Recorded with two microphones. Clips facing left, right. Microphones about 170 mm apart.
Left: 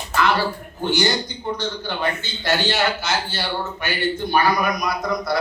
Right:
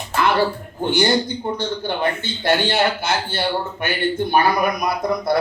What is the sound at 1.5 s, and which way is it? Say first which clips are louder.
A man's voice: right 1 dB; 55° right (ahead or behind).